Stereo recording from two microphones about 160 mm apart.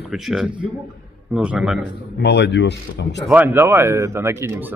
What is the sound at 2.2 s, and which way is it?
Speech, 90° left.